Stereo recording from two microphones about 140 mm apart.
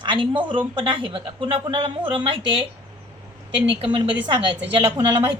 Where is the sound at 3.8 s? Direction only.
35° right (ahead or behind).